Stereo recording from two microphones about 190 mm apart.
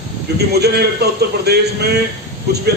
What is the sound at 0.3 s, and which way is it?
A man's voice, 60° right (ahead or behind).